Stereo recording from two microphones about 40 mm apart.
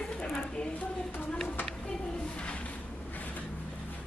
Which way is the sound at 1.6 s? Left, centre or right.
Centre.